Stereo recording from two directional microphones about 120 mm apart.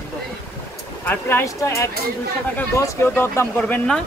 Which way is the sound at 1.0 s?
20° left (ahead or behind).